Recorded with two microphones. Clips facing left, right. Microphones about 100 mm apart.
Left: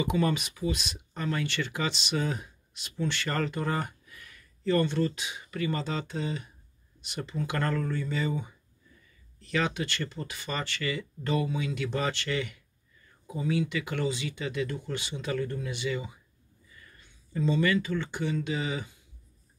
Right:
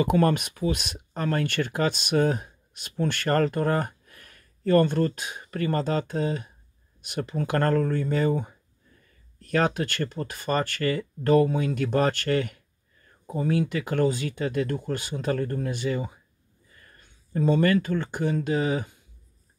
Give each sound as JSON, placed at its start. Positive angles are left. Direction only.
{"t": 0.0, "sound": "speech", "side_deg": -50}